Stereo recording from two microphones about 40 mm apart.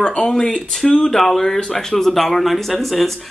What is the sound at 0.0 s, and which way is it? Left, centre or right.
Speech, left.